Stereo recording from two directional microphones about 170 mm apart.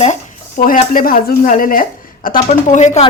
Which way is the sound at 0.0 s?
45° left (ahead or behind).